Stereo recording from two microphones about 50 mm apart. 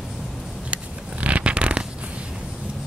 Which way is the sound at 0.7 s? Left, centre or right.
Right.